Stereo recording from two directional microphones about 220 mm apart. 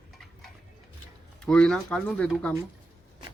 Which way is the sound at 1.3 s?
5° left (ahead or behind).